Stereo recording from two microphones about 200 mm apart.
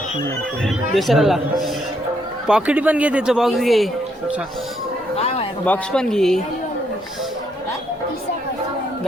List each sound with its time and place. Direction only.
0.6 s speech: centre (ahead or behind)
5.1 s a sound: 30° left (ahead or behind)
5.6 s speech: 5° left (ahead or behind)